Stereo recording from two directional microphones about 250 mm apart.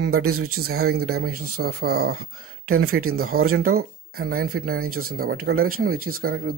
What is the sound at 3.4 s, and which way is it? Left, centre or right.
Speech, right.